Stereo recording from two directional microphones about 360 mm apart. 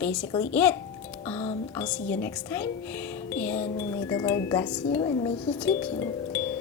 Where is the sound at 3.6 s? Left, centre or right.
Centre.